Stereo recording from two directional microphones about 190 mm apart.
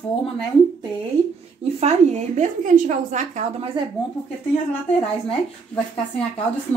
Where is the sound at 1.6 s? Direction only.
35° right (ahead or behind).